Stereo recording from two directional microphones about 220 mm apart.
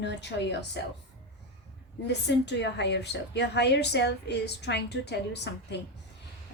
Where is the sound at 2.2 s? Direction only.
50° left (ahead or behind).